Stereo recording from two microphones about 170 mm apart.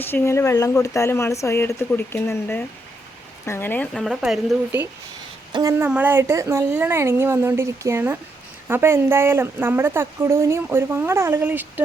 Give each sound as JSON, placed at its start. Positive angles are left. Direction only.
{"t": 0.0, "sound": "speech", "side_deg": 15}
{"t": 5.5, "sound": "a woman's voice", "side_deg": -25}
{"t": 5.7, "sound": "speech", "side_deg": -10}